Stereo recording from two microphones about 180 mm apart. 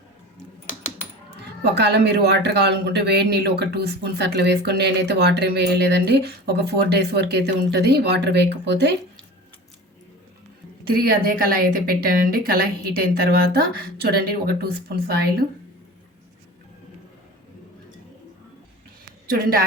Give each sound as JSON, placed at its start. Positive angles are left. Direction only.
{"t": 1.8, "sound": "speech", "side_deg": -70}
{"t": 10.9, "sound": "speech", "side_deg": -55}
{"t": 19.3, "sound": "speech", "side_deg": -55}